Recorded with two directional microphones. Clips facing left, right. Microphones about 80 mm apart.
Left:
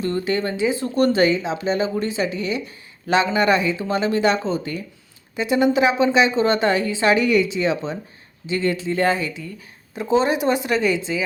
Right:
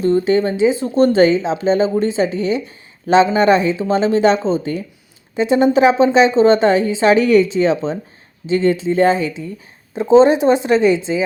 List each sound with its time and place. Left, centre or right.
0.0 s a woman's voice: right
8.4 s a woman's voice: right